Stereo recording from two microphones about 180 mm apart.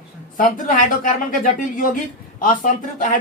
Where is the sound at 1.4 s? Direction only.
50° left (ahead or behind).